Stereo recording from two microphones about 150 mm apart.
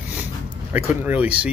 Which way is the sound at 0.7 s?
10° right (ahead or behind).